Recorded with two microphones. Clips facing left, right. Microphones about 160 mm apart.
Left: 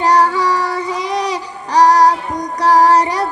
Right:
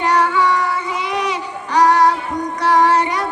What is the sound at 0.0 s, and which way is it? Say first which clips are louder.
Child singing: left 2 dB; 35° left (ahead or behind).